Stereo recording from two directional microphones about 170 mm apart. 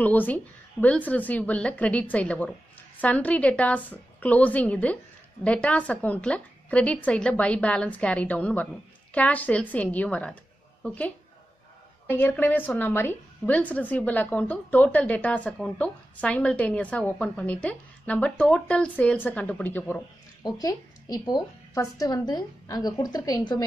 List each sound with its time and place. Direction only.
0.0 s a woman's voice: 10° left (ahead or behind)